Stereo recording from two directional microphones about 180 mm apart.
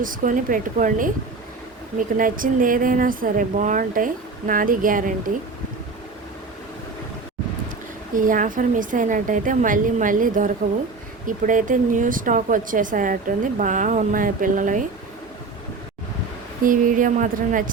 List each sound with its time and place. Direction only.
0.0 s speech: 50° right (ahead or behind)
2.1 s speech: 50° right (ahead or behind)
8.1 s speech: 50° right (ahead or behind)
16.6 s speech: 45° right (ahead or behind)